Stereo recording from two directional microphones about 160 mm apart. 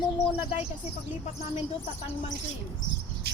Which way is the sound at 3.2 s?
90° right.